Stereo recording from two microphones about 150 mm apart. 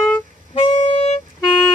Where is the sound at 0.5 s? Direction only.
40° left (ahead or behind).